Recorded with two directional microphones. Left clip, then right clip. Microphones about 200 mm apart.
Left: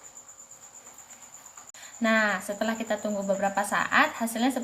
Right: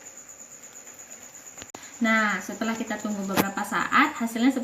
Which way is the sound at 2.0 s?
55° left (ahead or behind).